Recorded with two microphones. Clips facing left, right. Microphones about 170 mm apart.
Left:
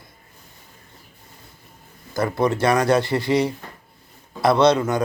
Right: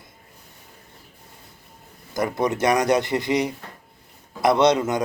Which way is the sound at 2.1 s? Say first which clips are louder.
Left 2 dB; 20° right (ahead or behind).